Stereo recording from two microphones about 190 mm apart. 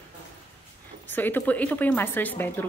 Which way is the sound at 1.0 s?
10° left (ahead or behind).